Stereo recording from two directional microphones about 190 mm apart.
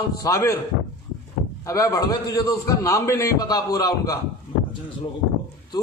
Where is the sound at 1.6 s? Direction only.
15° left (ahead or behind).